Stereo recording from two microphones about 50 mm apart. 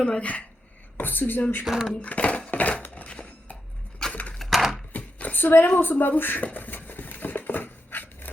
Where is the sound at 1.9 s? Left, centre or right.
Left.